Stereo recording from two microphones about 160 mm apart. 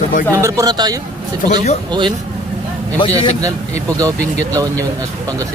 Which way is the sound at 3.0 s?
30° left (ahead or behind).